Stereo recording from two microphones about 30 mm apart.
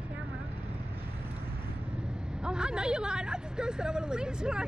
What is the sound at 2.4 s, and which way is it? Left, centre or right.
Speech, right.